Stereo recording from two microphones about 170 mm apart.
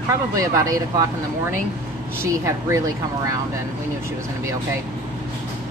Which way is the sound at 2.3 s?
20° right (ahead or behind).